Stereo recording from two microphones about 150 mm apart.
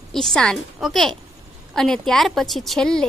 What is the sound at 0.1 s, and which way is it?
Speech, 5° left (ahead or behind).